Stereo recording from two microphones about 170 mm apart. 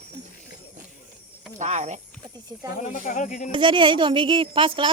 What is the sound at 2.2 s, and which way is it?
Speech, 20° right (ahead or behind).